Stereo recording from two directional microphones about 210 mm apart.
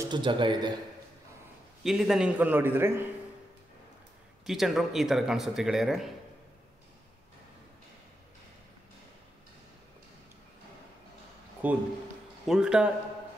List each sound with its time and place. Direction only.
0.0 s a man's voice: 20° right (ahead or behind)
1.8 s a man's voice: centre (ahead or behind)
4.5 s speech: centre (ahead or behind)
11.6 s a man's voice: 5° right (ahead or behind)